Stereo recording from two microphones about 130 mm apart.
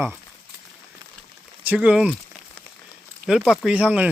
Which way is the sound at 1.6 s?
10° right (ahead or behind).